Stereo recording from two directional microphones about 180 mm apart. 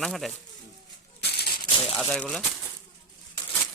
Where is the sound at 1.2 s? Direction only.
65° left (ahead or behind).